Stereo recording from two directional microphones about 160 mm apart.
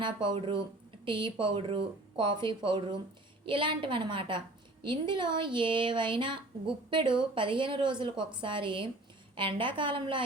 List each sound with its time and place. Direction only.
0.0 s a woman's voice: 30° right (ahead or behind)